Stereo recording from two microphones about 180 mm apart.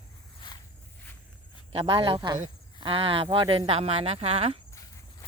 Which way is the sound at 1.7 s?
30° right (ahead or behind).